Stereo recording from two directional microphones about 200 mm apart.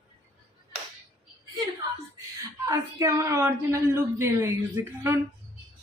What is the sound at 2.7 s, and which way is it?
A woman's voice, 15° right (ahead or behind).